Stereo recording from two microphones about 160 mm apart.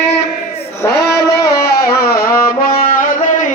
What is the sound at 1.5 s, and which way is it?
Music, 75° left (ahead or behind).